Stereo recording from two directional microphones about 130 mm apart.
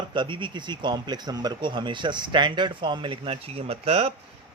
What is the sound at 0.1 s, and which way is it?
Speech, 40° right (ahead or behind).